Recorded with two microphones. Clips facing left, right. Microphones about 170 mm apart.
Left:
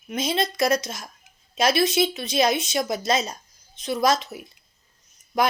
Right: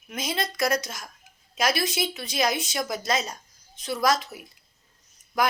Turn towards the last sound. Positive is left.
turn(degrees=25)  # may be behind; listen again after turning